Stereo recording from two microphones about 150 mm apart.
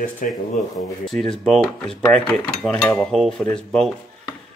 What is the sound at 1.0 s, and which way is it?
Speech, centre (ahead or behind).